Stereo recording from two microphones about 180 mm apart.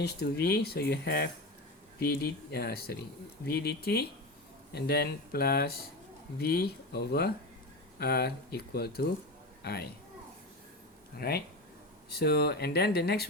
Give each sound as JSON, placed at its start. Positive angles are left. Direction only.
{"t": 0.0, "sound": "speech", "side_deg": 60}
{"t": 11.2, "sound": "speech", "side_deg": 60}